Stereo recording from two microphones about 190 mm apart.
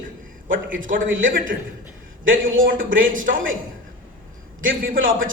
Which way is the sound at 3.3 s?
90° right.